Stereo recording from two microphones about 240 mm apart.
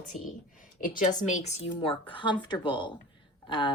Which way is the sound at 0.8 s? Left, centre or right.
Left.